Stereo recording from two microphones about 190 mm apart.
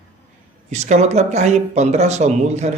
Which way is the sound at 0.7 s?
35° right (ahead or behind).